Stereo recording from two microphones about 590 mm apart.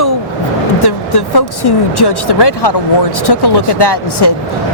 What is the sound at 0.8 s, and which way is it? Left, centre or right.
Speech, left.